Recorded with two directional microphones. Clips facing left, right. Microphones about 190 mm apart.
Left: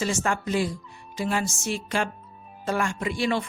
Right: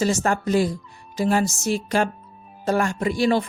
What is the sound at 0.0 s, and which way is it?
Speech, 40° right (ahead or behind).